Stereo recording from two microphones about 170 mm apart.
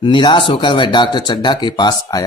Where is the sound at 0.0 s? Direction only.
30° left (ahead or behind).